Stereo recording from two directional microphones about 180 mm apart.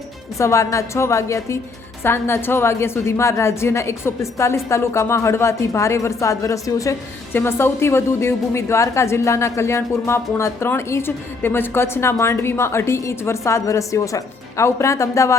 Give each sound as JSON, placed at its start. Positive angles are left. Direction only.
{"t": 0.3, "sound": "a woman's voice", "side_deg": 15}